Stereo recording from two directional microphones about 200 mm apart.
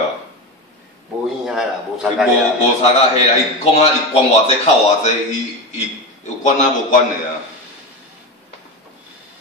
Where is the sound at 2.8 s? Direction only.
30° left (ahead or behind).